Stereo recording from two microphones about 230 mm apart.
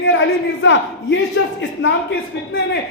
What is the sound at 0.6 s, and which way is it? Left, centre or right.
A man's voice, left.